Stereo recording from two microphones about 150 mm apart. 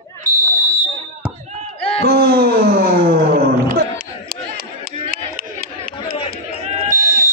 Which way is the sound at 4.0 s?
80° right.